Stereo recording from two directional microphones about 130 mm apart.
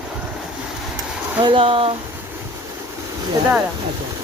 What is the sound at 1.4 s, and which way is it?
Speech, 40° right (ahead or behind).